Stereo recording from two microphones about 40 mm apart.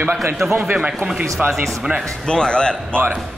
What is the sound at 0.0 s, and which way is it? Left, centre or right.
Speech, right.